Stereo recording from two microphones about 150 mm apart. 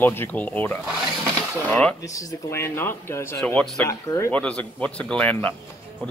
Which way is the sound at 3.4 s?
5° left (ahead or behind).